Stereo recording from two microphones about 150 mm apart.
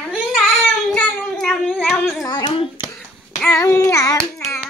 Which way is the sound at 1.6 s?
10° left (ahead or behind).